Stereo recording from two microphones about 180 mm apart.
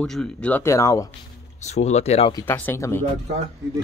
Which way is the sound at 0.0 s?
5° left (ahead or behind).